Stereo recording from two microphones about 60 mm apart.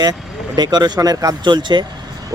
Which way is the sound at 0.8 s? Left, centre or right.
Right.